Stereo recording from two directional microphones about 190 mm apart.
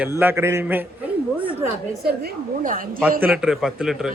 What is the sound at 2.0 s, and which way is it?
Speech, 50° right (ahead or behind).